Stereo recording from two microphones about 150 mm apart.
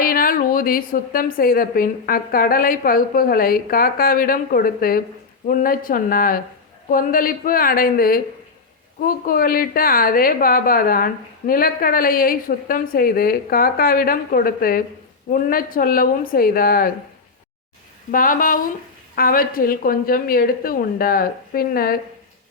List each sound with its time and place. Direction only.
0.0 s a woman's voice: 75° left (ahead or behind)
18.1 s a woman's voice: 65° left (ahead or behind)